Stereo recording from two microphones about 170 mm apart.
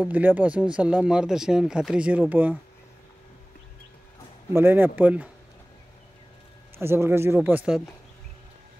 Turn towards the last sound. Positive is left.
turn(degrees=-10)  # may be behind; listen again after turning